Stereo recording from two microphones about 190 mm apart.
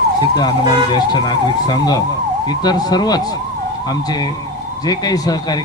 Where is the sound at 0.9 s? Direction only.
20° left (ahead or behind).